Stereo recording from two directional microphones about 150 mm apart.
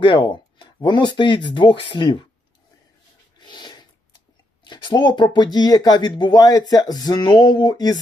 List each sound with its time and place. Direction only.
0.0 s speech: 35° left (ahead or behind)
3.4 s a sound: 30° left (ahead or behind)
4.6 s speech: 30° left (ahead or behind)